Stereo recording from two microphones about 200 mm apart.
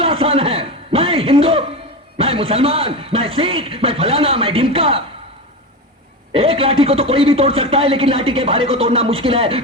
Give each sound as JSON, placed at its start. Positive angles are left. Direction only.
{"t": 0.0, "sound": "a sound", "side_deg": -30}
{"t": 2.1, "sound": "a man's voice", "side_deg": -30}
{"t": 6.3, "sound": "a man's voice", "side_deg": -30}